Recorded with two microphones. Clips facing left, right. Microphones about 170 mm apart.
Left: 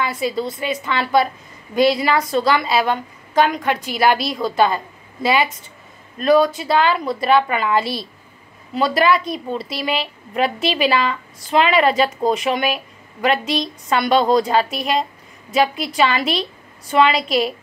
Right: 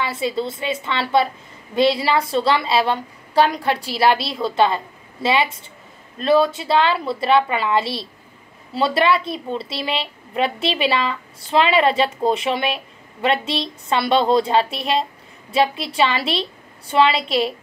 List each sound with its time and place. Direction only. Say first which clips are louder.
0.0 s a woman's voice: left 1 dB; 25° right (ahead or behind)